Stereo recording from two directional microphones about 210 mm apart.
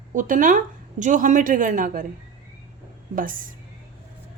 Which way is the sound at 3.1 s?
40° right (ahead or behind).